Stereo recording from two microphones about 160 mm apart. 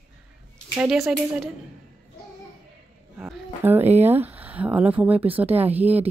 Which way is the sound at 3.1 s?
10° right (ahead or behind).